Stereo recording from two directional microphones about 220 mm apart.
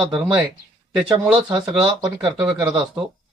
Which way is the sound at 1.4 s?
15° right (ahead or behind).